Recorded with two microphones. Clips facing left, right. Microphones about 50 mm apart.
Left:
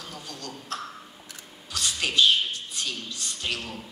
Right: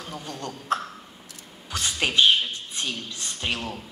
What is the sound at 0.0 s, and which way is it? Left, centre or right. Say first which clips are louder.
A man's voice: right 5 dB; right.